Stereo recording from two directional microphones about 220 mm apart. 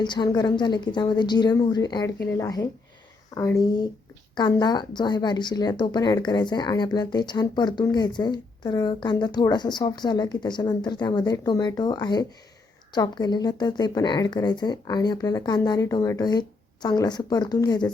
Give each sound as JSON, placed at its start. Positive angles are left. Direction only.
{"t": 0.0, "sound": "speech", "side_deg": 20}
{"t": 4.4, "sound": "speech", "side_deg": 20}